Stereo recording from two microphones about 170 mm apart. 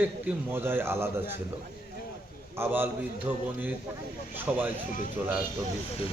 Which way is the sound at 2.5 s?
15° right (ahead or behind).